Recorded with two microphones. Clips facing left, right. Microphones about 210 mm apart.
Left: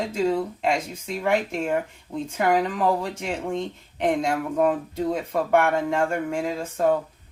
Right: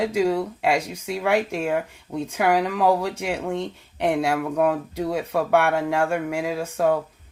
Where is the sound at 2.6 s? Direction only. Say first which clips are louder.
Right 3 dB; 75° right (ahead or behind).